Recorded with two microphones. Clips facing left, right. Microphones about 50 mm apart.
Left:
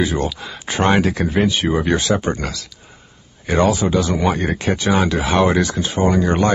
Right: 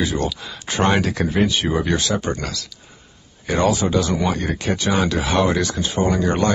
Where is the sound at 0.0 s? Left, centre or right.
Centre.